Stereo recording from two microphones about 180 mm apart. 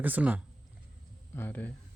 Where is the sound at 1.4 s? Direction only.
10° left (ahead or behind).